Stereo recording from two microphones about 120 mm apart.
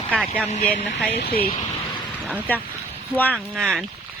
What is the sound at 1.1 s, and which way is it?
Speech, 65° left (ahead or behind).